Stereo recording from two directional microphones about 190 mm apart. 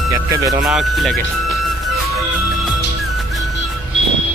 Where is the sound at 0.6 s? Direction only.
Centre (ahead or behind).